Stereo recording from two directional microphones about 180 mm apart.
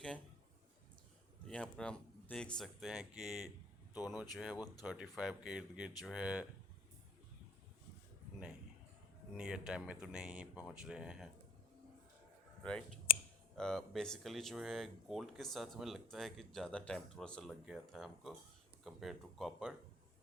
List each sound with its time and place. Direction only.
1.5 s speech: 5° left (ahead or behind)
4.5 s speech: 20° left (ahead or behind)
4.8 s speech: 5° right (ahead or behind)
9.4 s speech: 5° right (ahead or behind)
13.6 s speech: 5° left (ahead or behind)